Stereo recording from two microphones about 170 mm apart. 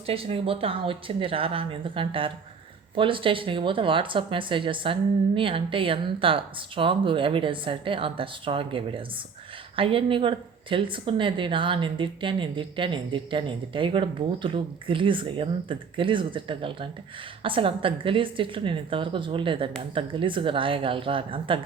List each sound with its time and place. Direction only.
0.0 s speech: 35° right (ahead or behind)